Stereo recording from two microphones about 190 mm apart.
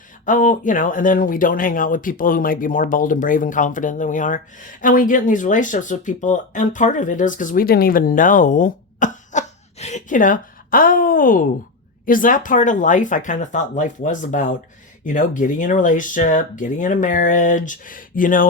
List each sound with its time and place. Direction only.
0.3 s speech: 45° left (ahead or behind)